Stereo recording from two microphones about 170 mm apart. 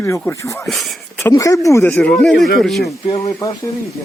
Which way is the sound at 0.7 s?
Centre (ahead or behind).